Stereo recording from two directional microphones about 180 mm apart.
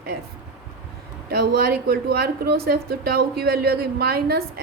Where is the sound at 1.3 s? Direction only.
60° right (ahead or behind).